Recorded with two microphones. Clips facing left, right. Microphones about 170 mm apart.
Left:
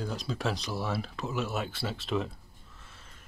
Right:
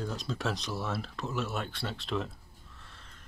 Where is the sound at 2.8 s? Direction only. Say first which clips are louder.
Left 1 dB; 5° left (ahead or behind).